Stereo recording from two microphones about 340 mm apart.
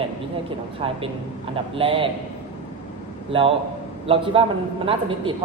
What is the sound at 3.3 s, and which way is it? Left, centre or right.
A woman's voice, centre.